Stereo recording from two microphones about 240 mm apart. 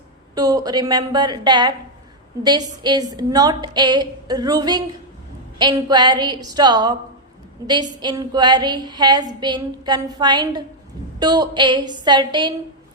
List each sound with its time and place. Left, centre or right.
0.3 s a woman's voice: centre